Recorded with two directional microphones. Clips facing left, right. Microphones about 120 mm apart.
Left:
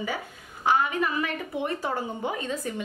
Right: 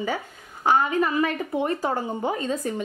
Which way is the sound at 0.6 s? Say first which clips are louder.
Right 3 dB; 35° right (ahead or behind).